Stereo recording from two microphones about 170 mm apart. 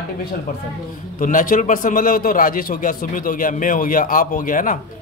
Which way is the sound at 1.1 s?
50° left (ahead or behind).